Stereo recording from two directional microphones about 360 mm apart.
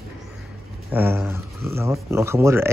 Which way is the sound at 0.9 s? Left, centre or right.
Centre.